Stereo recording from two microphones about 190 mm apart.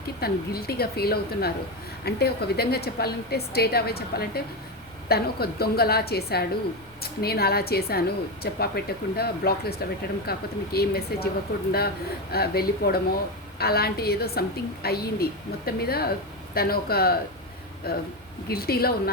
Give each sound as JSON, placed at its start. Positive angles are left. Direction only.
{"t": 0.2, "sound": "a woman's voice", "side_deg": 55}